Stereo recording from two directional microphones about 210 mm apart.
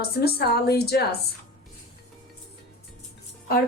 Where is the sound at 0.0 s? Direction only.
50° left (ahead or behind).